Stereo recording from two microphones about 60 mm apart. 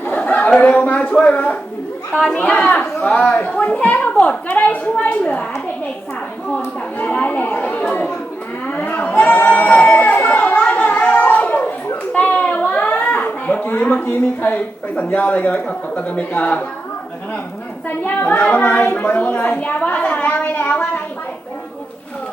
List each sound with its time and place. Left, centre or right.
0.3 s a sound: left
2.2 s speech: centre
3.2 s a woman's voice: left
7.0 s a woman's voice: left
9.5 s a woman's voice: centre
9.8 s a sound: left
12.5 s a woman's voice: left
17.8 s a woman's voice: left
20.3 s speech: left